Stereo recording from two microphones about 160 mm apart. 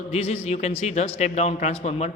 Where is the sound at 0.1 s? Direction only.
40° left (ahead or behind).